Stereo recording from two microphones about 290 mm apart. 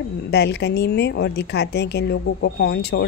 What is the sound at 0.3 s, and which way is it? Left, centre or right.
A woman's voice, left.